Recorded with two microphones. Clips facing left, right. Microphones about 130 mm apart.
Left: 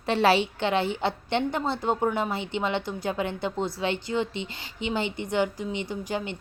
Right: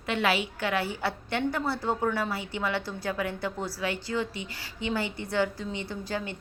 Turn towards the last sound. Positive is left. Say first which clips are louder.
# left 3 dB
turn(degrees=20)  # may be behind; listen again after turning